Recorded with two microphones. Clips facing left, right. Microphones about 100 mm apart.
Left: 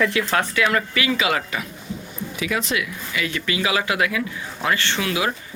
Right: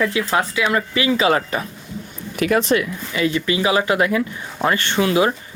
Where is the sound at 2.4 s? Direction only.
50° right (ahead or behind); by 5.3 s 30° right (ahead or behind).